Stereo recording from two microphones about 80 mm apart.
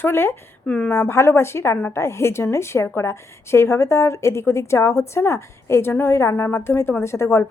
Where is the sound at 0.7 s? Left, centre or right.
Centre.